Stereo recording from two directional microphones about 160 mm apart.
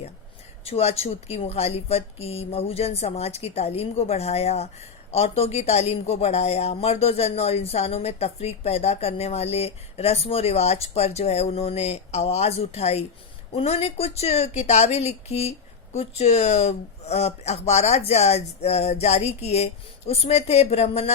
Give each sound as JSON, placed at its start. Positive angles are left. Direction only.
{"t": 0.6, "sound": "speech", "side_deg": 40}